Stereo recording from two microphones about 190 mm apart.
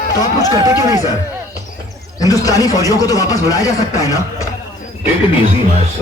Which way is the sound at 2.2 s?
20° left (ahead or behind).